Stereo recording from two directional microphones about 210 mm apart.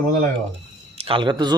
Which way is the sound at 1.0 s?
25° right (ahead or behind).